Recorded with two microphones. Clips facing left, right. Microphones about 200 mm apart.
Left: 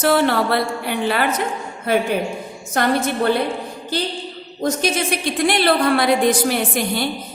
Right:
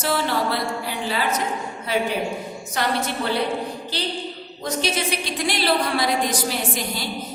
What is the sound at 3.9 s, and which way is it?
A woman's voice, 50° left (ahead or behind).